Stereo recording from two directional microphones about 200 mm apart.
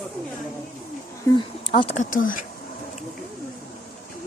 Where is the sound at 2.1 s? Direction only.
40° left (ahead or behind).